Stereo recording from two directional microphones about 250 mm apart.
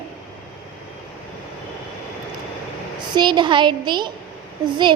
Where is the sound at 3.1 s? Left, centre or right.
Centre.